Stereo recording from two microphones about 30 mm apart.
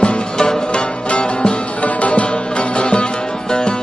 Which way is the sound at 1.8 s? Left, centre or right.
Left.